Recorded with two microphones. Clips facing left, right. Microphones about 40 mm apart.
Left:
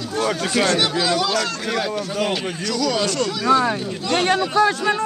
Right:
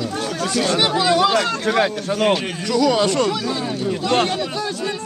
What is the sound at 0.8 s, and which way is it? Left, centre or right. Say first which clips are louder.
Speech: right 4 dB; right.